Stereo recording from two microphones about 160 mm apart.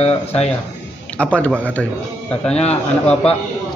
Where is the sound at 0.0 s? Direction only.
40° left (ahead or behind).